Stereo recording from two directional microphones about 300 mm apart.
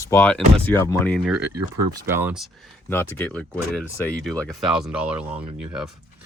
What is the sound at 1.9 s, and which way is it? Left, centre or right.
Speech, centre.